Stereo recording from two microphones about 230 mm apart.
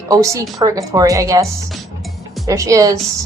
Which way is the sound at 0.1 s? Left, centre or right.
Centre.